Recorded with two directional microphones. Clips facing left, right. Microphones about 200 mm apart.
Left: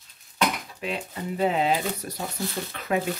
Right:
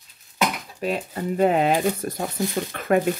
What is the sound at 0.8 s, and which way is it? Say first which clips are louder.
Speech: right 6 dB; 45° right (ahead or behind).